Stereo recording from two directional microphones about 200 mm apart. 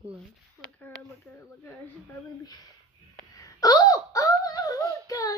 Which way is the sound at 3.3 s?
15° left (ahead or behind).